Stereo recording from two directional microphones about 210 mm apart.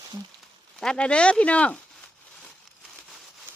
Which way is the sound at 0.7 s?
5° left (ahead or behind).